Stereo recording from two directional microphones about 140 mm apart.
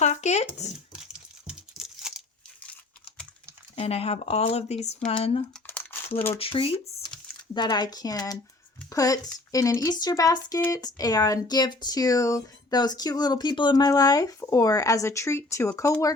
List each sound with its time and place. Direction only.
0.0 s speech: 55° left (ahead or behind)
1.5 s tearing: 5° right (ahead or behind)
3.8 s speech: 45° left (ahead or behind)
5.1 s speech: 40° left (ahead or behind)
5.6 s crumpling: 15° left (ahead or behind)
6.4 s speech: 40° left (ahead or behind)
7.1 s a sound: 5° left (ahead or behind)
7.5 s speech: 30° left (ahead or behind)